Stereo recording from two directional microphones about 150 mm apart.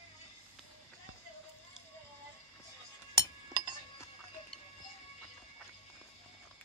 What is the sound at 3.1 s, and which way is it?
Chink, 30° right (ahead or behind).